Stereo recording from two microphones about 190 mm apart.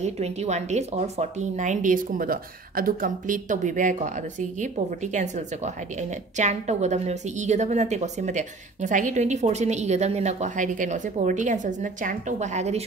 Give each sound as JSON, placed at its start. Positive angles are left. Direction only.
{"t": 0.0, "sound": "speech", "side_deg": -35}